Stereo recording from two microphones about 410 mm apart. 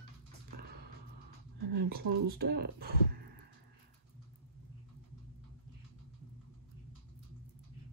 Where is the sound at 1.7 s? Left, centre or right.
Right.